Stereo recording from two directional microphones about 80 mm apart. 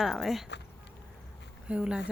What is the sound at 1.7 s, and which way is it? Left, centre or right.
Speech, centre.